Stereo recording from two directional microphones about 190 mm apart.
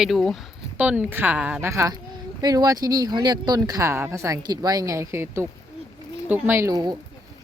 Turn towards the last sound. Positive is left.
turn(degrees=-20)  # may be behind; listen again after turning